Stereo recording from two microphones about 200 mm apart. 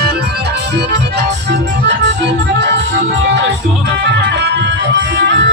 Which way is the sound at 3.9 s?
60° right (ahead or behind).